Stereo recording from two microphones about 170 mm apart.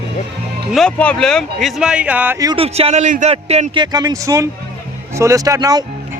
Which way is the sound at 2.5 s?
35° right (ahead or behind).